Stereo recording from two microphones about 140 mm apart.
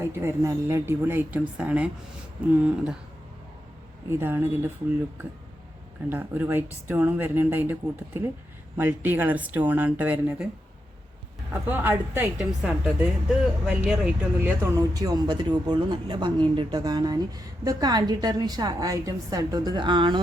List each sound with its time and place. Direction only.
0.0 s speech: 15° right (ahead or behind)
4.2 s speech: 15° right (ahead or behind)
6.1 s speech: 15° right (ahead or behind)
11.7 s speech: 15° right (ahead or behind)
12.4 s a woman's voice: 5° right (ahead or behind)
14.8 s speech: 25° right (ahead or behind)